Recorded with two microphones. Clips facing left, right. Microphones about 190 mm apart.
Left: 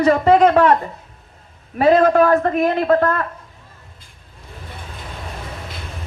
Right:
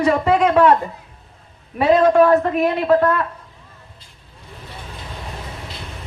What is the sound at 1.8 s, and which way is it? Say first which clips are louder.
A woman's voice: even; 40° left (ahead or behind).